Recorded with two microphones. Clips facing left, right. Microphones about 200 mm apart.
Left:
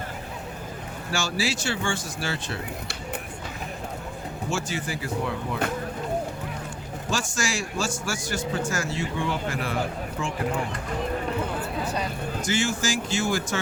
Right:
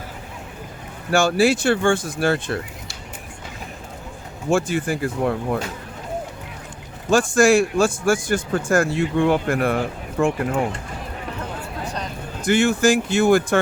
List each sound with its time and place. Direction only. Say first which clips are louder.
1.1 s a man's voice: right 11 dB; 55° right (ahead or behind)
4.4 s speech: right 10 dB; 55° right (ahead or behind)
7.1 s a man's voice: right 14 dB; 55° right (ahead or behind)
12.4 s a man's voice: right 10 dB; 55° right (ahead or behind)